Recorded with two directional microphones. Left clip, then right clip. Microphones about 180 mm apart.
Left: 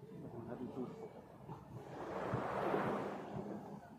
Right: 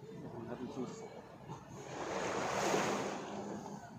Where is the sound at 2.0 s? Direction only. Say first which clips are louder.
Right 4 dB; 25° right (ahead or behind).